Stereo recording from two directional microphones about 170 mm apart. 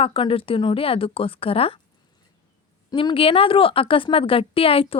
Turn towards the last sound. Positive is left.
turn(degrees=35)  # may be behind; listen again after turning